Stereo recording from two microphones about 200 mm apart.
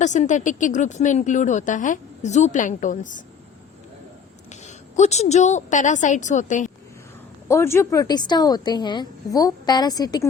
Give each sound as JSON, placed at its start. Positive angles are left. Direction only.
{"t": 0.0, "sound": "speech", "side_deg": 35}
{"t": 4.6, "sound": "speech", "side_deg": 35}
{"t": 7.4, "sound": "a woman's voice", "side_deg": 15}